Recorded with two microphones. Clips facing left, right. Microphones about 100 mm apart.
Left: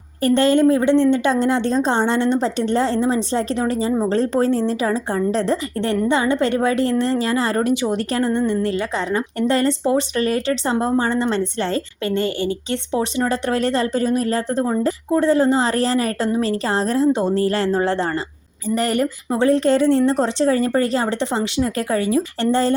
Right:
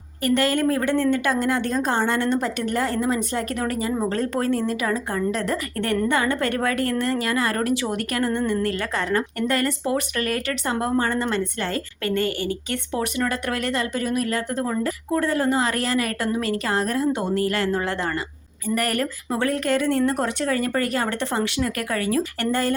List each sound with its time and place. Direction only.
0.2 s a woman's voice: 30° left (ahead or behind)